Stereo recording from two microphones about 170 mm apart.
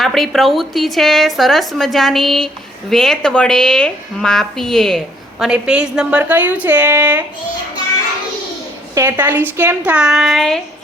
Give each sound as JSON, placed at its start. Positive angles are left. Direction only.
{"t": 0.0, "sound": "a woman's voice", "side_deg": 0}
{"t": 9.0, "sound": "a woman's voice", "side_deg": -10}